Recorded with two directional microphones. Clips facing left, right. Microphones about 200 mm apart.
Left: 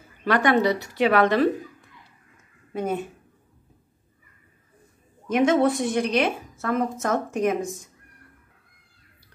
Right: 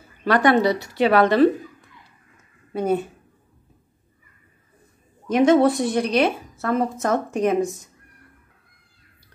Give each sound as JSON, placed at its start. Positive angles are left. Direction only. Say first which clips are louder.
{"t": 0.2, "sound": "a woman's voice", "louder": "right 3 dB", "side_deg": -35}
{"t": 2.7, "sound": "speech", "louder": "right 5 dB", "side_deg": -35}
{"t": 5.3, "sound": "a woman's voice", "louder": "right 4 dB", "side_deg": -35}